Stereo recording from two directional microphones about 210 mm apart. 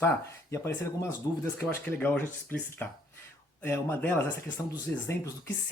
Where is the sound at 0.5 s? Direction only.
10° left (ahead or behind).